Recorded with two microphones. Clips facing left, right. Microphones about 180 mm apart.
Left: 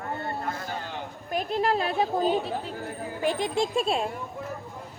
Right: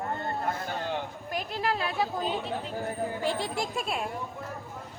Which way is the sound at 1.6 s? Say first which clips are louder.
Left 4 dB; 35° left (ahead or behind).